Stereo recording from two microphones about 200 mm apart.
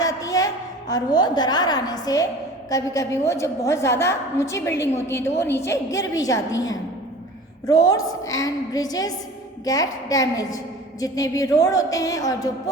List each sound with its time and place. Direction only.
0.0 s a sound: 15° left (ahead or behind)
2.6 s a woman's voice: 15° left (ahead or behind)
7.7 s a woman's voice: 15° left (ahead or behind)